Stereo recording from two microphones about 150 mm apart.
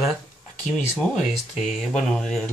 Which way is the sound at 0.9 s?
Centre (ahead or behind).